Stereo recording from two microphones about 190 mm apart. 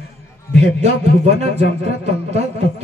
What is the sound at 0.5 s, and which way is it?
Speech, 35° right (ahead or behind).